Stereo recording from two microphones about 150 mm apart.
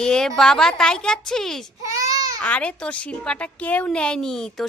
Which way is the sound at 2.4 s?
10° left (ahead or behind).